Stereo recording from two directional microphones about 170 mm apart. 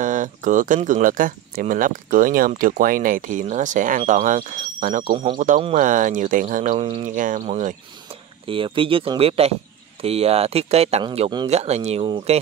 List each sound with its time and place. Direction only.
0.0 s speech: 50° right (ahead or behind)
6.8 s speech: 35° right (ahead or behind)
7.2 s speech: 50° right (ahead or behind)
8.5 s speech: 30° right (ahead or behind)